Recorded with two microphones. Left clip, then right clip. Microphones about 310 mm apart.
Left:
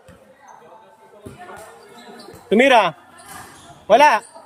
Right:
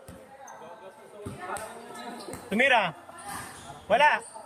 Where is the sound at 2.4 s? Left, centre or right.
Left.